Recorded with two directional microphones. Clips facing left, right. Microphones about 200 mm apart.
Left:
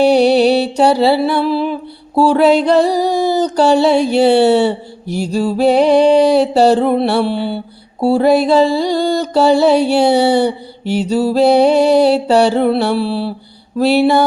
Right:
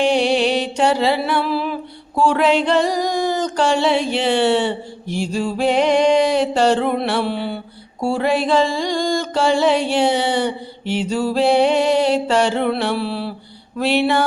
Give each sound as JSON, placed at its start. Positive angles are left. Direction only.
{"t": 0.0, "sound": "music", "side_deg": 40}